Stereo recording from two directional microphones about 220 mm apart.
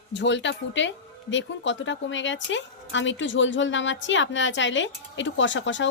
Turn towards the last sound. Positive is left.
turn(degrees=55)  # may be behind; listen again after turning